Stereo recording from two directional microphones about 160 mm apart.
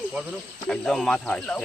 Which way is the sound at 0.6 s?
5° left (ahead or behind).